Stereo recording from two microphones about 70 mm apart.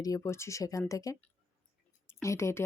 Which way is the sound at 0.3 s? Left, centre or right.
Left.